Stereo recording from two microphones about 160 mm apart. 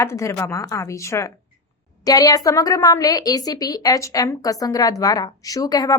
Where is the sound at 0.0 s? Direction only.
15° left (ahead or behind).